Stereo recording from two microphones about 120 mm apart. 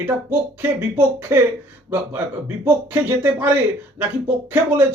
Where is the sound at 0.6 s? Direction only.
20° right (ahead or behind).